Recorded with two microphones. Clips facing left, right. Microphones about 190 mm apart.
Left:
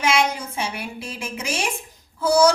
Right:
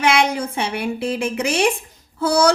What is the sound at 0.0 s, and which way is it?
A woman's voice, 60° right (ahead or behind).